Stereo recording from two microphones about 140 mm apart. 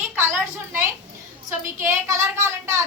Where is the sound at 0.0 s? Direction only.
15° right (ahead or behind).